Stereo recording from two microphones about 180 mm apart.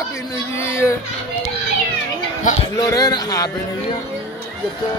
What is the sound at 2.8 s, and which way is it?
Speech, 20° left (ahead or behind).